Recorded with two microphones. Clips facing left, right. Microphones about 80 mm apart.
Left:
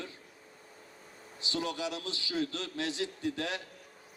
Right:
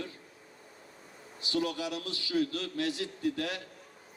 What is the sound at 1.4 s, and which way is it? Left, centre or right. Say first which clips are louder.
A man's voice: right 2 dB; left.